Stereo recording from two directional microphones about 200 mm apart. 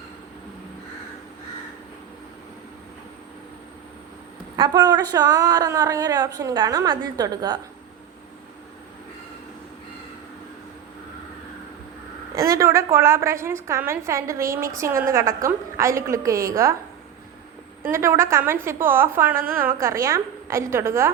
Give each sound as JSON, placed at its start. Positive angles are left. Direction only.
{"t": 4.5, "sound": "a woman's voice", "side_deg": -20}
{"t": 12.3, "sound": "a woman's voice", "side_deg": -15}
{"t": 17.8, "sound": "a woman's voice", "side_deg": -15}